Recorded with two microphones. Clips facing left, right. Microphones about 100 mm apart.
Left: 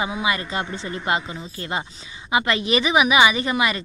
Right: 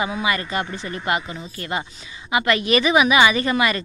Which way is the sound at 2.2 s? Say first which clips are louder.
Right 1 dB; 25° left (ahead or behind).